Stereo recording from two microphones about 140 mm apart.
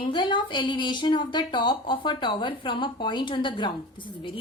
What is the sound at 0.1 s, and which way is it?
A woman's voice, 35° left (ahead or behind).